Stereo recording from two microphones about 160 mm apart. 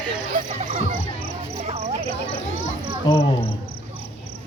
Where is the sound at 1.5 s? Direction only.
40° right (ahead or behind).